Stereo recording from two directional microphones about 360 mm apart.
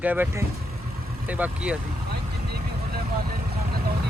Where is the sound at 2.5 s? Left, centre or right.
Right.